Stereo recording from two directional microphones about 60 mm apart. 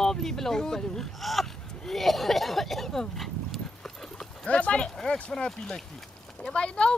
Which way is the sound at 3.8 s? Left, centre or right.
Centre.